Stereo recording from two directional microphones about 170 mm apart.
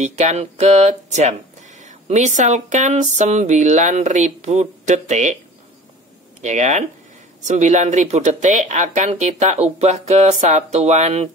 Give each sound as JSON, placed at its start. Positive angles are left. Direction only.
{"t": 0.0, "sound": "speech", "side_deg": -40}
{"t": 6.4, "sound": "speech", "side_deg": -45}